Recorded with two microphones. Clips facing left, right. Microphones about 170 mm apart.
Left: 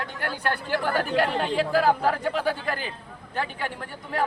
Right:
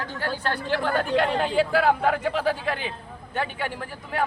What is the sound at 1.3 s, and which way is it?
Speech, centre (ahead or behind).